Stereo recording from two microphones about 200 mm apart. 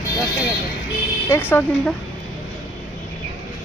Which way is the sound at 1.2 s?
10° left (ahead or behind).